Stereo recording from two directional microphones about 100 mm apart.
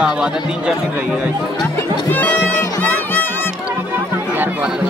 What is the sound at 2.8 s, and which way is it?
Music, 20° left (ahead or behind).